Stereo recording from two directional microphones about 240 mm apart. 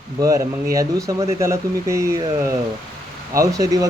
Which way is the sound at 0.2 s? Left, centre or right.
Centre.